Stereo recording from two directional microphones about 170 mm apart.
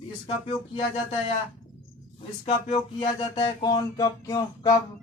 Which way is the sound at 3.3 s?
25° left (ahead or behind).